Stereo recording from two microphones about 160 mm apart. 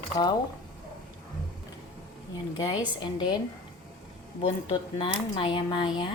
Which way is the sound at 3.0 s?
30° left (ahead or behind).